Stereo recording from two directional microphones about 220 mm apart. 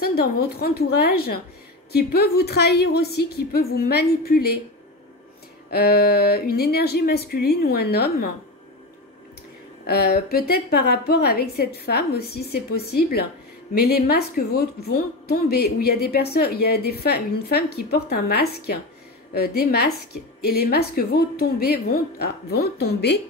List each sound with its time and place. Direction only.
0.0 s a woman's voice: 45° left (ahead or behind)
5.7 s a woman's voice: 45° left (ahead or behind)
9.8 s a woman's voice: 45° left (ahead or behind)